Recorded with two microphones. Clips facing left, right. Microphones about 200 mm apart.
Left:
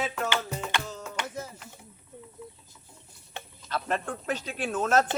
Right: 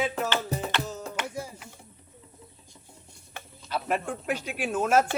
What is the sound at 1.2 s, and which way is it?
Music, 10° right (ahead or behind).